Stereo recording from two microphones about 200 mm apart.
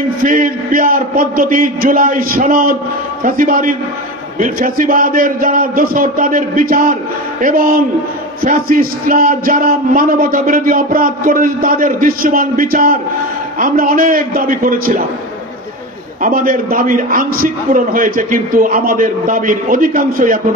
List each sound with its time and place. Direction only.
0.2 s a man's voice: 45° right (ahead or behind)
16.2 s a man's voice: 45° right (ahead or behind)